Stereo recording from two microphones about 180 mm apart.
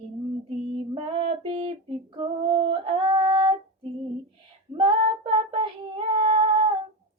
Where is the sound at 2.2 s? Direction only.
30° right (ahead or behind).